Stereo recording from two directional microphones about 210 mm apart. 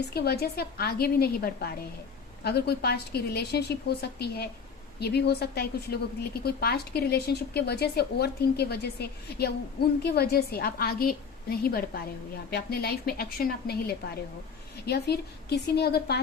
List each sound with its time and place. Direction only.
0.0 s a woman's voice: 50° left (ahead or behind)